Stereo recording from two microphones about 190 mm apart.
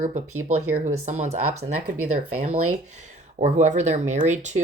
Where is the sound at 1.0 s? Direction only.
40° right (ahead or behind).